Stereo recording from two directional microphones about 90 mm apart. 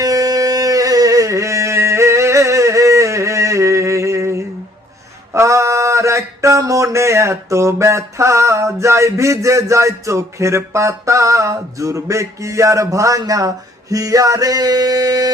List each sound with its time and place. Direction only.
0.0 s music: 40° right (ahead or behind)
5.3 s mantra: 35° right (ahead or behind)
13.9 s music: 40° right (ahead or behind)